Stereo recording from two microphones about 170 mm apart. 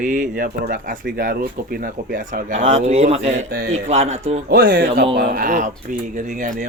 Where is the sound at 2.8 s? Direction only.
40° right (ahead or behind).